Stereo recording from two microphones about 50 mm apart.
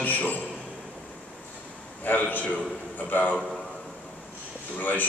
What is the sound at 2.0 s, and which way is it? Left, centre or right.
A man's voice, left.